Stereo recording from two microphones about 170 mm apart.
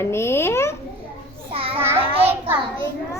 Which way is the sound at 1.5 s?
35° right (ahead or behind).